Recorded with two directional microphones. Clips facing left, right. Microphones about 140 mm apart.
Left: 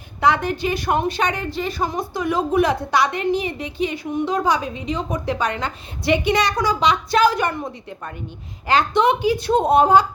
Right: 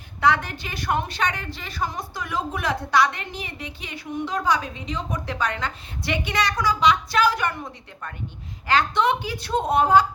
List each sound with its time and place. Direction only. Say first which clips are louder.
0.2 s a woman's voice: left 3 dB; 15° left (ahead or behind)